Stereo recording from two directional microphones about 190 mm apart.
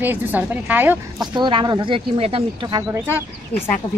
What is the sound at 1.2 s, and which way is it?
Speech, 25° right (ahead or behind).